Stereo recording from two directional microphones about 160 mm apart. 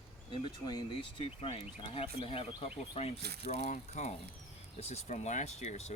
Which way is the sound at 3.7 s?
45° left (ahead or behind).